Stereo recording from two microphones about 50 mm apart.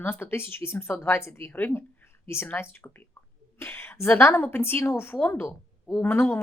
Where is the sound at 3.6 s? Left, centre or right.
Left.